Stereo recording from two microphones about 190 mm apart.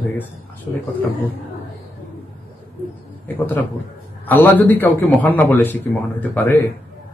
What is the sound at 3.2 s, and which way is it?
A man's voice, 10° left (ahead or behind).